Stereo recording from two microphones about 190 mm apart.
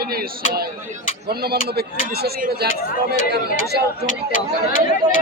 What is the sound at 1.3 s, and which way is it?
A man's voice, 55° right (ahead or behind).